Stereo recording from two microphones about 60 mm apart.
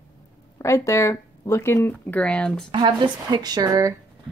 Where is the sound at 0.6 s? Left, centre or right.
Left.